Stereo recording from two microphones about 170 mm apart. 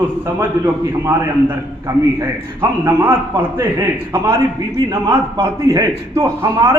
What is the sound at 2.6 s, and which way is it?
A man's voice, 10° right (ahead or behind).